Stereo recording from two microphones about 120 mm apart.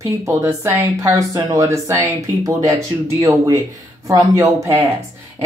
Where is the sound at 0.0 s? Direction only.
25° right (ahead or behind).